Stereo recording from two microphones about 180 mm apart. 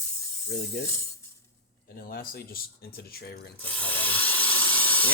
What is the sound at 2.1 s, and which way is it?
Speech, 55° left (ahead or behind).